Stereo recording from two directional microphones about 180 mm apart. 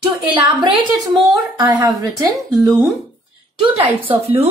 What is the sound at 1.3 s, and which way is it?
Speech, 20° right (ahead or behind).